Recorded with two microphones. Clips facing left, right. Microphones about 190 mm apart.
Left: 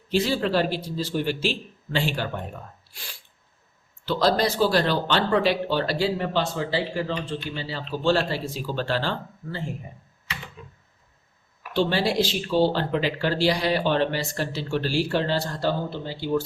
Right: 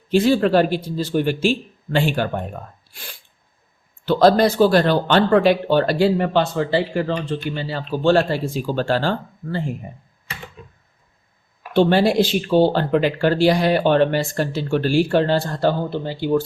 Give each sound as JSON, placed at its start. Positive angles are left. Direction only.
{"t": 0.1, "sound": "speech", "side_deg": -55}
{"t": 4.0, "sound": "speech", "side_deg": -55}
{"t": 11.7, "sound": "speech", "side_deg": -55}